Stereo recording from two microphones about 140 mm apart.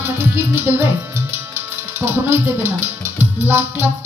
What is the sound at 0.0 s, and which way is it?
Music, 15° right (ahead or behind).